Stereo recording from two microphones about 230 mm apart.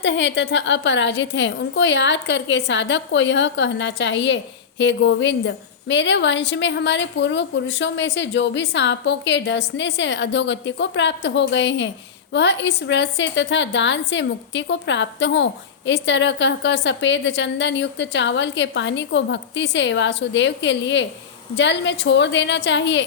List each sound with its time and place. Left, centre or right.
0.0 s a woman's voice: left